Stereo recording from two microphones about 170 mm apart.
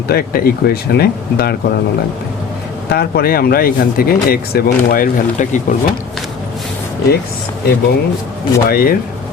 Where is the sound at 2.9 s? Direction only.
65° left (ahead or behind).